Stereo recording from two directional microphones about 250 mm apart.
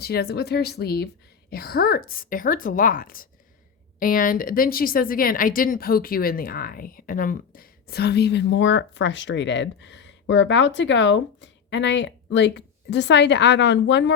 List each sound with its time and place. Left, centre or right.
0.0 s a woman's voice: left